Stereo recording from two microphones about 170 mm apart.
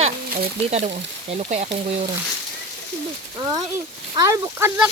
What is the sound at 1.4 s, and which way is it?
Speech, 40° right (ahead or behind).